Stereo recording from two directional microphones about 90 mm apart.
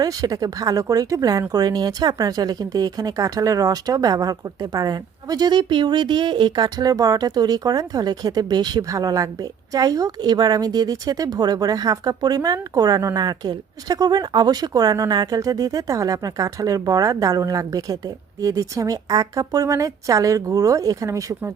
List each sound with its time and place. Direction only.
0.0 s speech: 45° right (ahead or behind)